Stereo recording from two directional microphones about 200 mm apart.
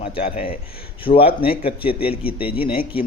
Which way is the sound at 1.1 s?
45° left (ahead or behind).